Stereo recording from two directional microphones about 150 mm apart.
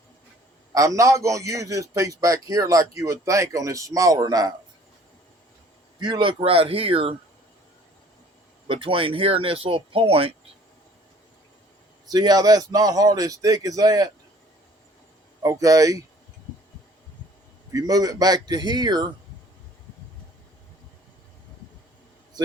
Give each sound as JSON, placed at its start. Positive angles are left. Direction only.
{"t": 0.7, "sound": "a man's voice", "side_deg": -20}
{"t": 6.0, "sound": "speech", "side_deg": -30}
{"t": 8.6, "sound": "speech", "side_deg": -35}
{"t": 12.1, "sound": "a man's voice", "side_deg": -25}
{"t": 15.4, "sound": "a man's voice", "side_deg": -25}
{"t": 17.7, "sound": "a man's voice", "side_deg": -25}